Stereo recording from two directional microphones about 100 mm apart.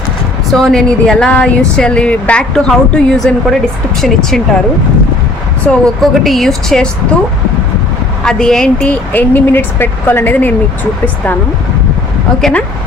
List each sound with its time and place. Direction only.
0.5 s speech: 5° left (ahead or behind)
5.6 s speech: 5° left (ahead or behind)
8.2 s speech: 5° left (ahead or behind)
12.4 s speech: 5° left (ahead or behind)